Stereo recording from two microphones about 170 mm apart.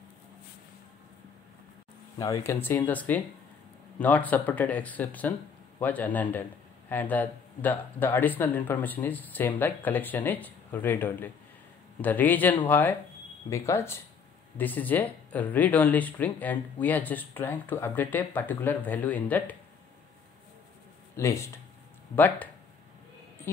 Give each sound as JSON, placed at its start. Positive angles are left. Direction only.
{"t": 2.1, "sound": "speech", "side_deg": 20}
{"t": 21.2, "sound": "speech", "side_deg": 15}